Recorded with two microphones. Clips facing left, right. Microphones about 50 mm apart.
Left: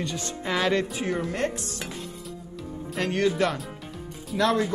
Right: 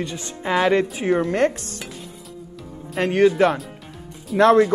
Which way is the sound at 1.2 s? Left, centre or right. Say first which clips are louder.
Right 8 dB; right.